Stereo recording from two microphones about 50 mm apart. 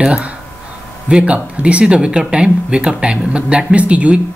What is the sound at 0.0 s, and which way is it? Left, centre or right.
Speech, centre.